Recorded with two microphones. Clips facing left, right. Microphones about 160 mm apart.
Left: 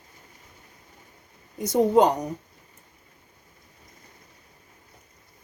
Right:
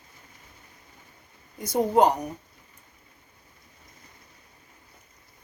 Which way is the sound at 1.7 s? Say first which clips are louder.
Left 2 dB; 70° left (ahead or behind).